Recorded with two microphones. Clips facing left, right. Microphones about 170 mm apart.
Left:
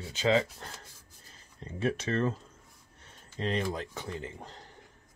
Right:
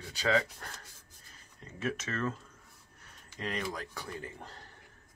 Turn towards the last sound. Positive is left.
turn(degrees=20)  # may be behind; listen again after turning